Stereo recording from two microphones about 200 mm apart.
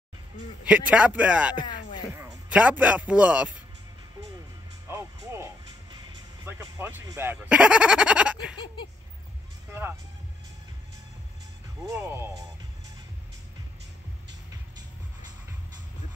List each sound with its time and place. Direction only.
0.7 s a man's voice: 5° right (ahead or behind)
1.6 s music: 20° left (ahead or behind)
2.1 s speech: 5° right (ahead or behind)
4.8 s music: 15° right (ahead or behind)
6.4 s speech: 15° right (ahead or behind)
9.7 s music: 10° right (ahead or behind)
11.9 s a man's voice: 15° right (ahead or behind)